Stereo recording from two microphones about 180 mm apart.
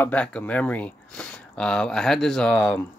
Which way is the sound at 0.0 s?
5° left (ahead or behind).